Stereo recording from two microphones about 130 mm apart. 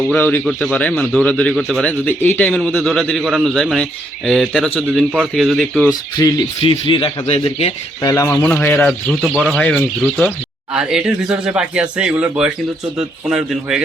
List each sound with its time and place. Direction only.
0.1 s a man's voice: 15° left (ahead or behind)
5.9 s speech: 30° left (ahead or behind)
6.6 s a man's voice: 45° left (ahead or behind)
8.0 s speech: 25° left (ahead or behind)
8.4 s speech: 10° left (ahead or behind)
9.2 s speech: 5° right (ahead or behind)
9.5 s speech: 10° left (ahead or behind)
10.7 s a man's voice: 5° right (ahead or behind)